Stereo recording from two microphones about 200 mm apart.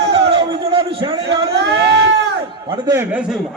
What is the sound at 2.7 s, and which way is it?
Speech, 15° right (ahead or behind).